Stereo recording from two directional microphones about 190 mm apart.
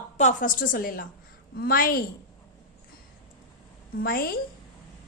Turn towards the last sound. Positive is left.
turn(degrees=50)  # may be behind; listen again after turning